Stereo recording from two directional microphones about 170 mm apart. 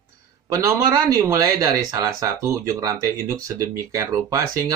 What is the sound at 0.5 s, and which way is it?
Speech, 20° right (ahead or behind).